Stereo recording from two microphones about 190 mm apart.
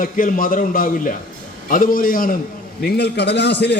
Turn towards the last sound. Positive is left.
turn(degrees=60)  # may be behind; listen again after turning